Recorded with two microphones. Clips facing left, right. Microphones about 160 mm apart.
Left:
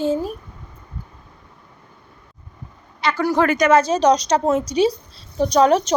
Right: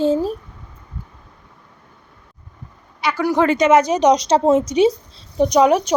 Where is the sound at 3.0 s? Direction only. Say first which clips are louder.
Right 1 dB; 10° right (ahead or behind).